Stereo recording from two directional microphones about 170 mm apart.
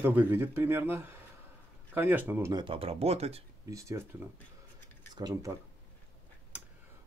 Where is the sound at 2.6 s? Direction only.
35° right (ahead or behind).